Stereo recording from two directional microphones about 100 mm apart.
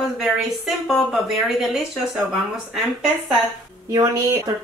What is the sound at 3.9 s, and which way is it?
Speech, 40° right (ahead or behind).